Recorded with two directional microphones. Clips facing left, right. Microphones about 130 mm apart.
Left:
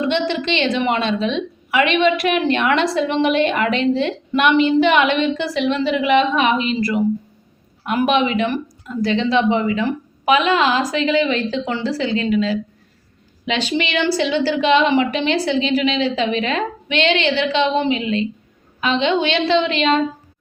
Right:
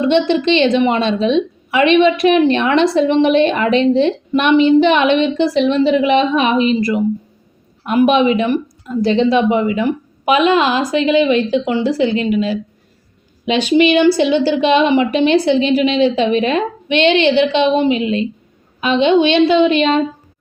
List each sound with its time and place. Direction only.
0.0 s a woman's voice: 20° right (ahead or behind)